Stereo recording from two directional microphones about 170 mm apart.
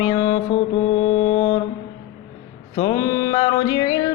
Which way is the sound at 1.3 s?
25° left (ahead or behind).